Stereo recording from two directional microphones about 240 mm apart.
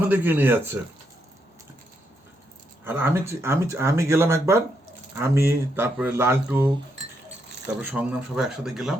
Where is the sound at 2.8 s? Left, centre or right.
Centre.